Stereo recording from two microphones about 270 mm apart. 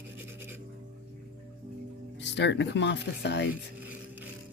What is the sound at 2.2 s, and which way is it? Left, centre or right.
Speech, left.